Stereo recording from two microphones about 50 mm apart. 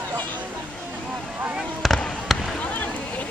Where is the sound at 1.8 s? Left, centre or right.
Centre.